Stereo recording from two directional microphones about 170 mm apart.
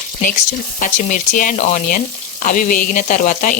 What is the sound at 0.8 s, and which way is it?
A woman's voice, 50° left (ahead or behind).